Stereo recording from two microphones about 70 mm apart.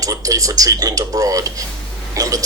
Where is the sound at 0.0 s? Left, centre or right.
Right.